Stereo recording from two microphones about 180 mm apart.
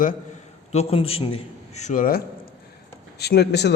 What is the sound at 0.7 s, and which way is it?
A man's voice, 35° left (ahead or behind).